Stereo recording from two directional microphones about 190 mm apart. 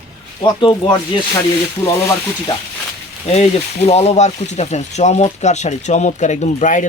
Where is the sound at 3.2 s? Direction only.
35° left (ahead or behind).